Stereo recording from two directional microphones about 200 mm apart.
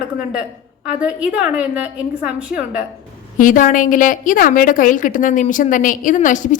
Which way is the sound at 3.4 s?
40° left (ahead or behind).